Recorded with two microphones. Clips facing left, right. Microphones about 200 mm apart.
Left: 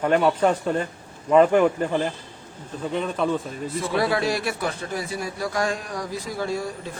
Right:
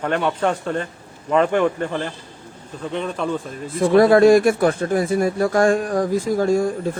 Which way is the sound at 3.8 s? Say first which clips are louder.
Right 12 dB; 50° right (ahead or behind).